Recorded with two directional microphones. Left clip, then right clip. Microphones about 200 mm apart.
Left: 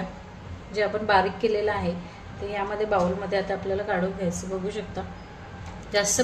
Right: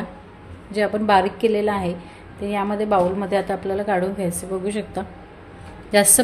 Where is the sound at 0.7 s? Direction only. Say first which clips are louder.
Right 4 dB; 50° right (ahead or behind).